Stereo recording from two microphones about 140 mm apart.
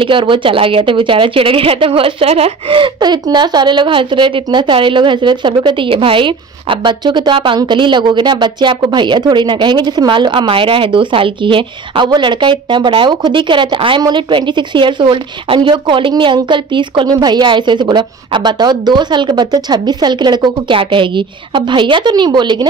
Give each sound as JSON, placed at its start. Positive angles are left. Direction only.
{"t": 0.0, "sound": "speech", "side_deg": -35}